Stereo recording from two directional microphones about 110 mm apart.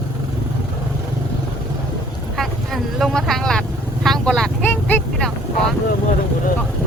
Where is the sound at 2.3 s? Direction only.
Centre (ahead or behind).